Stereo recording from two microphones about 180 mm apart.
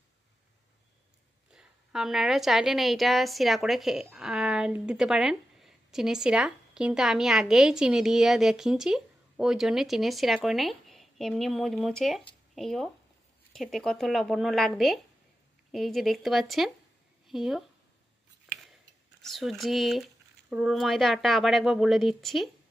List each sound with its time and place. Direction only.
1.5 s a woman's voice: 5° right (ahead or behind)
19.2 s a woman's voice: centre (ahead or behind)